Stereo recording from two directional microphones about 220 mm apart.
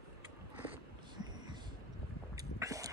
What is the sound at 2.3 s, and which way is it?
Boat, 15° right (ahead or behind).